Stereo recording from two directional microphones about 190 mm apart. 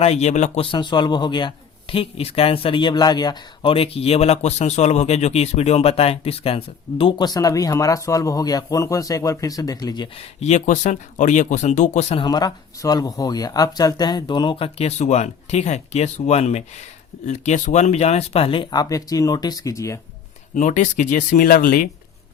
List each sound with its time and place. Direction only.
0.0 s speech: 35° left (ahead or behind)
10.4 s speech: 40° left (ahead or behind); by 20.0 s 15° left (ahead or behind)
20.6 s speech: 40° left (ahead or behind)